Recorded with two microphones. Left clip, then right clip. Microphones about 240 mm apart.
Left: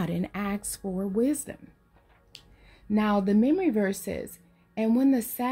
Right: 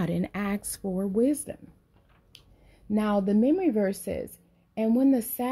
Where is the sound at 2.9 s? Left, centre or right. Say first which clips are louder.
Left 1 dB; centre.